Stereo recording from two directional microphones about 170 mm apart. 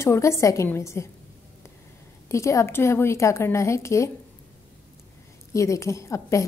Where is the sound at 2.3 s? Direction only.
15° left (ahead or behind).